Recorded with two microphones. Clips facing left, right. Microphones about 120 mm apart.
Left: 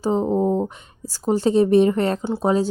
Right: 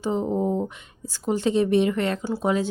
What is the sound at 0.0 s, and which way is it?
Speech, 35° left (ahead or behind).